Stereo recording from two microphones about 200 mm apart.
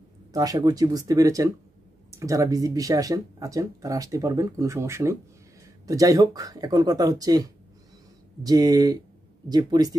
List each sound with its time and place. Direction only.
0.3 s speech: 20° right (ahead or behind)